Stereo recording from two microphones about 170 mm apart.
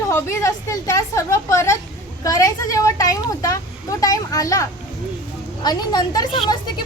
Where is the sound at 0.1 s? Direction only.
15° left (ahead or behind).